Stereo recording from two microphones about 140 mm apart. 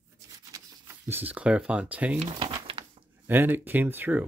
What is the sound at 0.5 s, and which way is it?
Speech, 15° right (ahead or behind).